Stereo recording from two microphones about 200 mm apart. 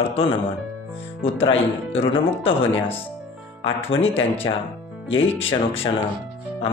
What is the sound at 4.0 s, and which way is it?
Speech, 30° left (ahead or behind).